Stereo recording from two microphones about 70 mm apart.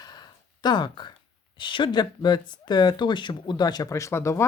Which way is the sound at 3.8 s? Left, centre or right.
Left.